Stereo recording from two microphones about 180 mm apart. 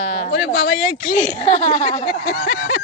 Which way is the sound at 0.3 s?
55° left (ahead or behind).